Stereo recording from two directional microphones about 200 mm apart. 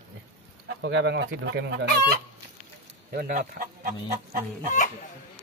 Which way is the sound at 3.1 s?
45° right (ahead or behind).